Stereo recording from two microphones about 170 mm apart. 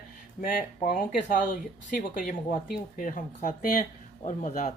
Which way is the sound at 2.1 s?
50° left (ahead or behind).